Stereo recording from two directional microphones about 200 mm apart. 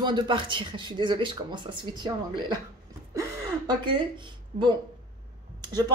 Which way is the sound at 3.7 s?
25° right (ahead or behind).